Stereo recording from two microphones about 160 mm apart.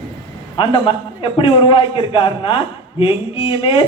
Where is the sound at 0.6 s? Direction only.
30° left (ahead or behind).